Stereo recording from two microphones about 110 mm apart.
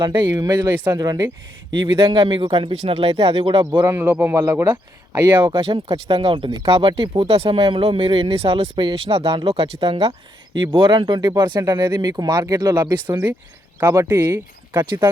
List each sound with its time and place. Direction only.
0.2 s speech: 35° right (ahead or behind)
1.7 s speech: 50° right (ahead or behind)
2.8 s speech: 65° right (ahead or behind)
3.8 s speech: 25° right (ahead or behind)
5.4 s speech: 50° right (ahead or behind)
10.6 s speech: 45° right (ahead or behind)
13.7 s speech: 25° right (ahead or behind)